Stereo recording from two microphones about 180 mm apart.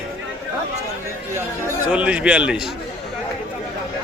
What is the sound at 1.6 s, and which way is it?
Speech, 5° right (ahead or behind).